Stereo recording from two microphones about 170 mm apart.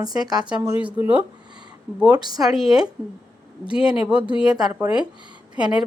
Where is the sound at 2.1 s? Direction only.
25° right (ahead or behind).